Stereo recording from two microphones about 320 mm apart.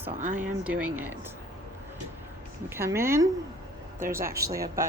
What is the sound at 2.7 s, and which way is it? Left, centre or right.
Speech, centre.